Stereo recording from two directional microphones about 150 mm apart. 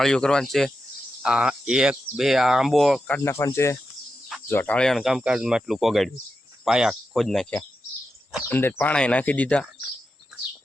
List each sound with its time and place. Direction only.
0.0 s speech: 5° left (ahead or behind)
3.2 s speech: 20° left (ahead or behind); by 7.6 s centre (ahead or behind)
8.4 s speech: 15° left (ahead or behind)